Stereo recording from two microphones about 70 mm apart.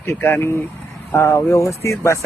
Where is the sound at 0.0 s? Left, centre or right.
Left.